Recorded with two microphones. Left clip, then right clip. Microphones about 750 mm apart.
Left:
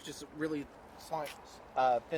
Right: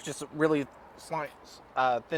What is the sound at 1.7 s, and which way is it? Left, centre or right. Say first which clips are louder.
Speech: right 3 dB; right.